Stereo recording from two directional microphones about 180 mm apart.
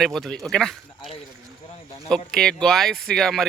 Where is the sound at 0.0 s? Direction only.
Centre (ahead or behind).